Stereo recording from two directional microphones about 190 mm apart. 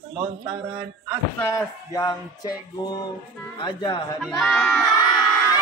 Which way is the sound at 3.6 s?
25° left (ahead or behind).